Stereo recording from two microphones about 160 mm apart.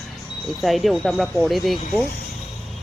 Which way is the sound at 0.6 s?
Centre (ahead or behind).